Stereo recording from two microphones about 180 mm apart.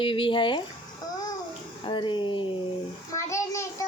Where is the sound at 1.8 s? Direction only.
25° left (ahead or behind).